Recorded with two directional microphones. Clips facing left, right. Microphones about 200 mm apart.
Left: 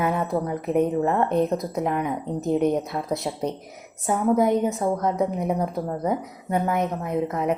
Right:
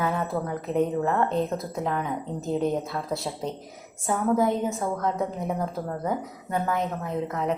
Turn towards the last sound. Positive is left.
turn(degrees=20)  # may be behind; listen again after turning